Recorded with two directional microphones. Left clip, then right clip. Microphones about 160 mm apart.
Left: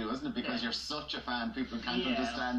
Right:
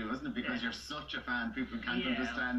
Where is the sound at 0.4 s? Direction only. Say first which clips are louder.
Left 2 dB; 5° right (ahead or behind).